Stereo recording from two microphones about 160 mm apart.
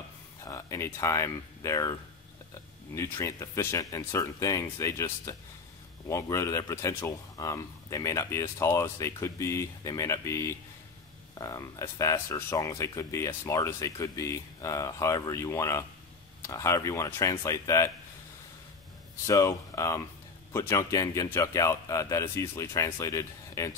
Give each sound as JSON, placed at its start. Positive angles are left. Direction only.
{"t": 0.5, "sound": "speech", "side_deg": 20}
{"t": 19.2, "sound": "speech", "side_deg": 20}